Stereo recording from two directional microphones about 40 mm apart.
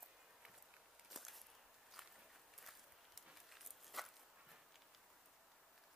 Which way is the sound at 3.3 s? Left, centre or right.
Centre.